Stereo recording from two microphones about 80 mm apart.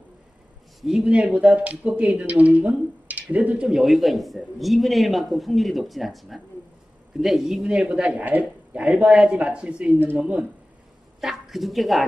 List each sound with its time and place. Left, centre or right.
0.7 s speech: centre
3.1 s a sound: centre
3.6 s speech: centre
11.1 s a woman's voice: centre